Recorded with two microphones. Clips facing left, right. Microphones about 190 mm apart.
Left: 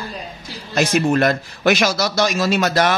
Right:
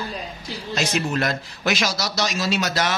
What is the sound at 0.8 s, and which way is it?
A man's voice, 55° left (ahead or behind).